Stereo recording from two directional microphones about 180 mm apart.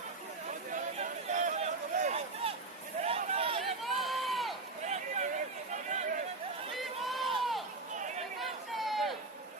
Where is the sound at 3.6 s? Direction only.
Centre (ahead or behind).